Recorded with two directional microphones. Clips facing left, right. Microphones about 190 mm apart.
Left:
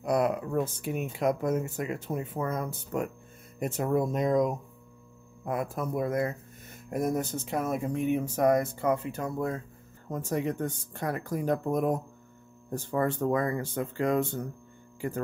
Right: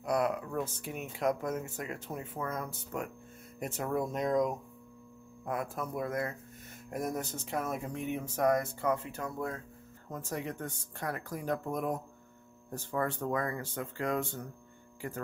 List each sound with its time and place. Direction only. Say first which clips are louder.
0.0 s speech: left 4 dB; 20° left (ahead or behind)
0.8 s speech: left 4 dB; 10° left (ahead or behind)